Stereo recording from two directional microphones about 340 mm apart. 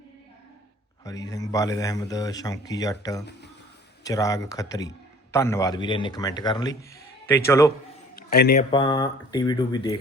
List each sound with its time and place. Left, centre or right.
1.3 s a man's voice: centre
8.1 s a sound: left
8.7 s a man's voice: centre